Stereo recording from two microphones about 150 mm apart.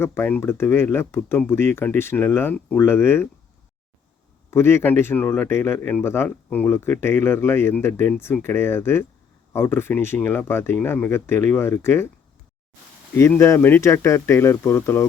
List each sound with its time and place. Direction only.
0.0 s speech: 15° left (ahead or behind)
4.5 s speech: 15° left (ahead or behind)
13.1 s speech: 15° left (ahead or behind)